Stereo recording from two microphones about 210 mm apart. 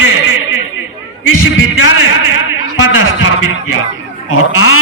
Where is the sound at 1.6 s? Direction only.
70° left (ahead or behind).